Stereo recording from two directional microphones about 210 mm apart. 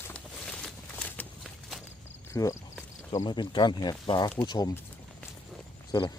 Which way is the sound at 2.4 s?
20° left (ahead or behind).